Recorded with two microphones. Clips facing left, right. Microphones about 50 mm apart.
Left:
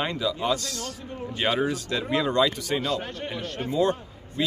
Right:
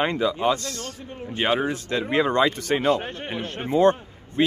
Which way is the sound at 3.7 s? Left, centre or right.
Right.